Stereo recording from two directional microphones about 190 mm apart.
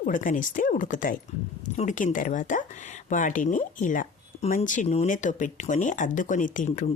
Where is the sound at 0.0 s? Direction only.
45° left (ahead or behind).